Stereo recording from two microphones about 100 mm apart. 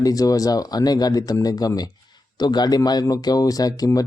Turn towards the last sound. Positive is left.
turn(degrees=40)  # may be behind; listen again after turning